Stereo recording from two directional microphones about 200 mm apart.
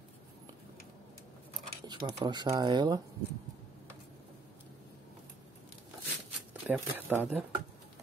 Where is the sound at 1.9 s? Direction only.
20° right (ahead or behind).